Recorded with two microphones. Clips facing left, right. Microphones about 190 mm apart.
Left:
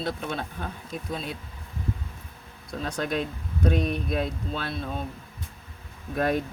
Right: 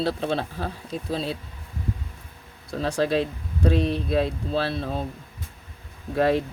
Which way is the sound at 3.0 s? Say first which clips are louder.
Right 6 dB; 30° right (ahead or behind).